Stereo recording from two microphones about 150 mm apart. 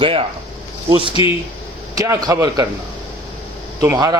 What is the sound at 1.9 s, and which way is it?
Speech, 25° right (ahead or behind).